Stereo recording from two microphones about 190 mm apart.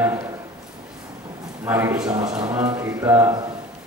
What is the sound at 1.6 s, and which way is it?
A man's voice, 10° right (ahead or behind).